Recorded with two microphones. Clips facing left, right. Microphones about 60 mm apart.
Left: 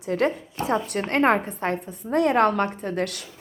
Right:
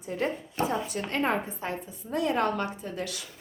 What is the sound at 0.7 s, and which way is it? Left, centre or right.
A woman's voice, left.